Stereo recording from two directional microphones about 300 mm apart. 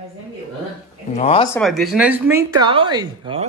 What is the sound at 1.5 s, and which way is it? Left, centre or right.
Speech, centre.